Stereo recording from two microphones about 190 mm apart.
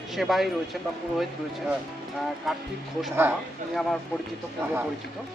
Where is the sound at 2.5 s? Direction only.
Centre (ahead or behind).